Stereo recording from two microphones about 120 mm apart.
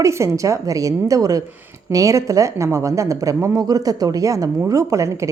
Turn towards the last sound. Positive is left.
turn(degrees=-25)  # may be behind; listen again after turning